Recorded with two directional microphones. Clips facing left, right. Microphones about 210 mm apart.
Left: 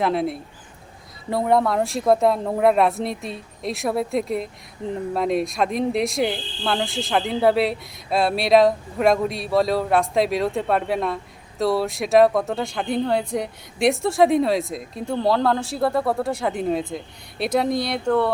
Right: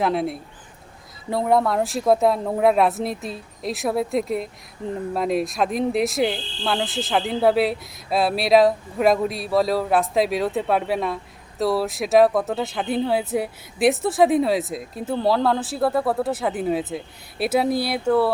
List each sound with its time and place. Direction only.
0.0 s speech: centre (ahead or behind)